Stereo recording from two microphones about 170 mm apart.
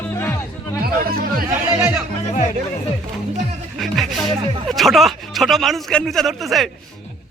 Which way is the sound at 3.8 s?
Centre (ahead or behind).